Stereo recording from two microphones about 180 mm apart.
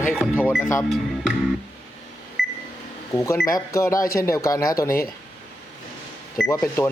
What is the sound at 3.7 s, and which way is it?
Speech, 15° left (ahead or behind).